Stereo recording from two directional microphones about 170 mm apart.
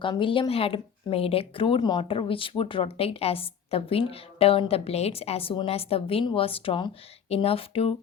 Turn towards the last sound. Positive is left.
turn(degrees=35)  # may be behind; listen again after turning